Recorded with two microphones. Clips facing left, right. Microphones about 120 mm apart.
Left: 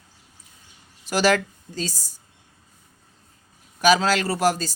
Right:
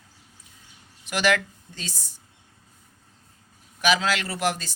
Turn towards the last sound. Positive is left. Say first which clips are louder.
# left 5 dB
turn(degrees=40)  # may be behind; listen again after turning